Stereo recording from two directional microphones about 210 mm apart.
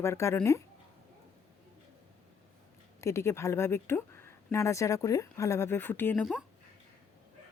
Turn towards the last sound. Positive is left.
turn(degrees=5)  # may be behind; listen again after turning